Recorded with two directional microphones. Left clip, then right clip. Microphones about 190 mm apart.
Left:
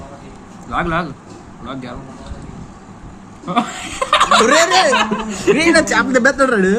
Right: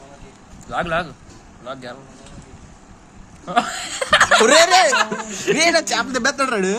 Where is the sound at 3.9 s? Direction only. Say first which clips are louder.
Left 2 dB; 30° right (ahead or behind).